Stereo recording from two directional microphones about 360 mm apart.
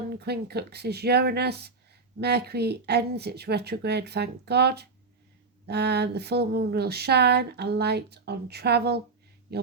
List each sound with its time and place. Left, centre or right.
0.2 s speech: right